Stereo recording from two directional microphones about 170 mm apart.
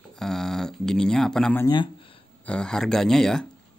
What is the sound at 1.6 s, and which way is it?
Speech, 25° left (ahead or behind).